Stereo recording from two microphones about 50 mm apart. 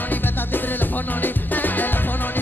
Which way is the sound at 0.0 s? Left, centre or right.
Left.